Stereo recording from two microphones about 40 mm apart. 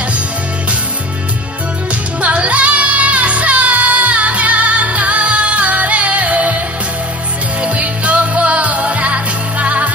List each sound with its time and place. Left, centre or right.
2.2 s music: right
7.6 s music: right